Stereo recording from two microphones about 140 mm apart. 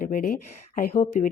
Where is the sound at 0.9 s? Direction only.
60° left (ahead or behind).